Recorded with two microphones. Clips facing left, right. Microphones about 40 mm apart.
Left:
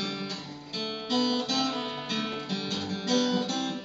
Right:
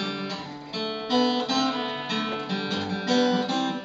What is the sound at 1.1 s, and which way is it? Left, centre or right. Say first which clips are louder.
Guitar: right 4 dB; centre.